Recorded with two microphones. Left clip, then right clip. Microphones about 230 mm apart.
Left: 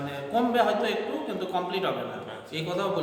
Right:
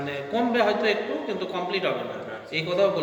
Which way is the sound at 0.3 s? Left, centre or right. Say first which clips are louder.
Right 1 dB; centre.